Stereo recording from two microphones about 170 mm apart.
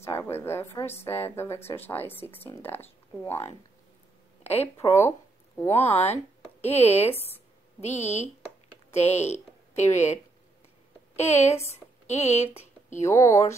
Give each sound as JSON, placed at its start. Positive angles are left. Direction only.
{"t": 0.0, "sound": "a woman's voice", "side_deg": 15}
{"t": 4.4, "sound": "a sound", "side_deg": 35}
{"t": 4.7, "sound": "a woman's voice", "side_deg": 15}
{"t": 5.8, "sound": "a woman's voice", "side_deg": 40}
{"t": 11.7, "sound": "a sound", "side_deg": 40}
{"t": 13.0, "sound": "a woman's voice", "side_deg": 15}